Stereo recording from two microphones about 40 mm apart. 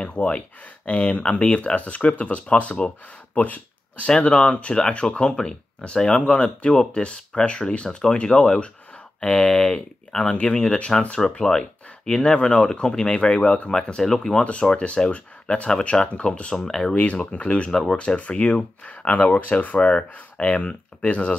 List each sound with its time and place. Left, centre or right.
0.0 s speech: left
3.3 s a sound: left
4.1 s speech: left
10.1 s speech: centre
10.5 s speech: left
14.4 s speech: left
16.5 s speech: centre
16.9 s speech: left
17.6 s speech: centre
17.9 s speech: left
19.0 s speech: left